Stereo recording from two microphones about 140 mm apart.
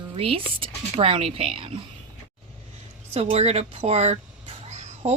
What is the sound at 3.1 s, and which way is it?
Speech, 45° right (ahead or behind).